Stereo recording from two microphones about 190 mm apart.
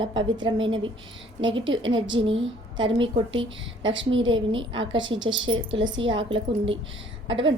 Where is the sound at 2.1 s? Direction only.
25° right (ahead or behind).